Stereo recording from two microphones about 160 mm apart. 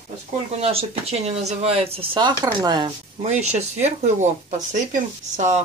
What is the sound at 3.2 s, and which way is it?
Speech, 45° right (ahead or behind).